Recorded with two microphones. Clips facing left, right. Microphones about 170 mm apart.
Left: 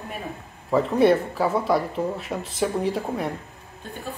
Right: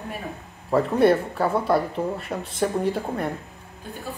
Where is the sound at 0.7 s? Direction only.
Centre (ahead or behind).